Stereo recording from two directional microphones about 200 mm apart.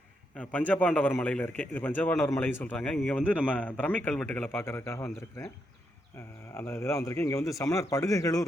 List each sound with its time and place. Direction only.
0.7 s a man's voice: 5° left (ahead or behind)
6.5 s a man's voice: 10° left (ahead or behind)